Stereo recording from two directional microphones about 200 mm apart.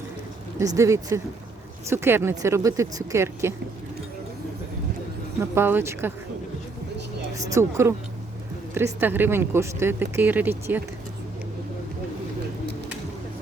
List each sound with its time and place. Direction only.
0.6 s speech: 15° right (ahead or behind)
5.4 s speech: 10° right (ahead or behind)
7.3 s speech: 15° right (ahead or behind)